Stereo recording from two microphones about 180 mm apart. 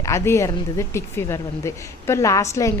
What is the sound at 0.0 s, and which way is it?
A woman's voice, 15° left (ahead or behind).